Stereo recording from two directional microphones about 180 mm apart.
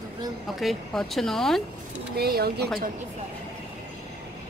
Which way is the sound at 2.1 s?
60° right (ahead or behind).